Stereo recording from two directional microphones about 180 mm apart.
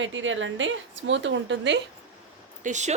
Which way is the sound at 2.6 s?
40° right (ahead or behind).